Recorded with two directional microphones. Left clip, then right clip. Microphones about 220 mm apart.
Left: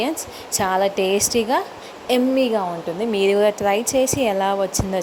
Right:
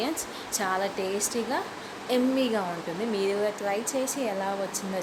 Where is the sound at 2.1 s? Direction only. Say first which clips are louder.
Left 8 dB; 25° left (ahead or behind).